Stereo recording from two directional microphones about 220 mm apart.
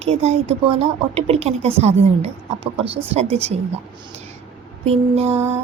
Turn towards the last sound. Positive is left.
turn(degrees=-30)  # may be behind; listen again after turning